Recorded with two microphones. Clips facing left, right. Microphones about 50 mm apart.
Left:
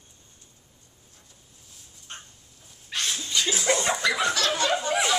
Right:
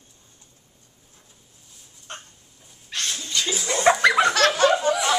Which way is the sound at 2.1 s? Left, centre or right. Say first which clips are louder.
Right 4 dB; right.